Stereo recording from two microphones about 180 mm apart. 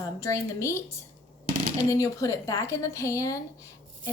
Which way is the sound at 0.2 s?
15° left (ahead or behind).